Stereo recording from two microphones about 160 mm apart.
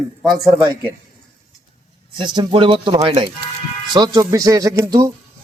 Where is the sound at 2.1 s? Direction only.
30° right (ahead or behind).